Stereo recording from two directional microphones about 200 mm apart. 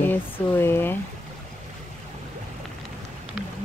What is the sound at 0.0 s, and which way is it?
Speech, 10° left (ahead or behind).